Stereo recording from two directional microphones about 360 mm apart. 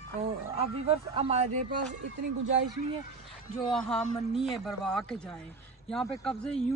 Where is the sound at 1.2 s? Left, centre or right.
Centre.